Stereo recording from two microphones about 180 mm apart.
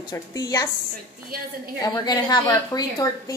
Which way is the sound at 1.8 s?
20° left (ahead or behind).